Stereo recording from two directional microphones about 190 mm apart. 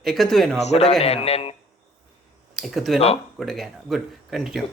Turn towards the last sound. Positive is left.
turn(degrees=0)  # may be behind; listen again after turning